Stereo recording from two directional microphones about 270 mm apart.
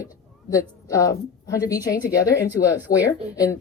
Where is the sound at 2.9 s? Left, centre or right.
Left.